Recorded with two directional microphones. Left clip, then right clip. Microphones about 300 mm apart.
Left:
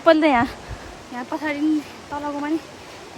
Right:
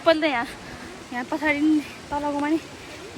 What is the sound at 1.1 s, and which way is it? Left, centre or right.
Speech, centre.